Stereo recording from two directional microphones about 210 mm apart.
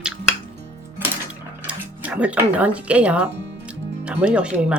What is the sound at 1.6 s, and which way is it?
Speech, 5° right (ahead or behind).